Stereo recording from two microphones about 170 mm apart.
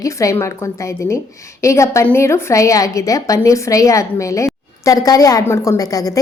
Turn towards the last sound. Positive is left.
turn(degrees=20)  # may be behind; listen again after turning